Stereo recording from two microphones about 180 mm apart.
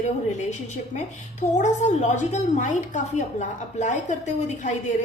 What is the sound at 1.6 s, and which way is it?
A woman's voice, 40° left (ahead or behind).